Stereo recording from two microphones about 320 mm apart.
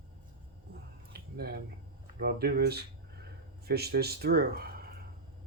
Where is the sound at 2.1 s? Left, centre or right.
Right.